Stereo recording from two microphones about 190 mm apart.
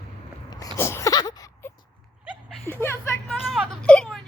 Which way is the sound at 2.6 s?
10° left (ahead or behind).